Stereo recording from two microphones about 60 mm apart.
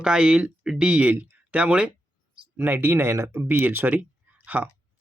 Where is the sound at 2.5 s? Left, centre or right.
Right.